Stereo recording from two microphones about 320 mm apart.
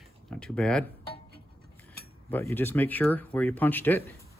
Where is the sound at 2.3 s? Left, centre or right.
Centre.